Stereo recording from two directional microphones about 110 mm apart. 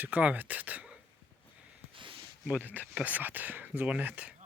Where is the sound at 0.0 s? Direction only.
15° right (ahead or behind).